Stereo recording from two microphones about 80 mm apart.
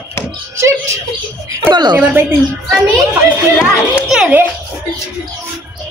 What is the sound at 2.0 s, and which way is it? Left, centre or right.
Speech, right.